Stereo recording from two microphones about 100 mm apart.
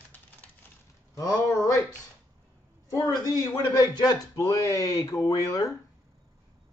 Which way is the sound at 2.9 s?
35° left (ahead or behind).